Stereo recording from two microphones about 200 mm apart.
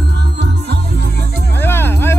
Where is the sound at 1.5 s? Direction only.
10° left (ahead or behind).